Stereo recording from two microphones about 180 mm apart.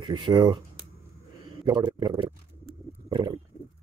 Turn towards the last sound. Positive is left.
turn(degrees=-25)  # may be behind; listen again after turning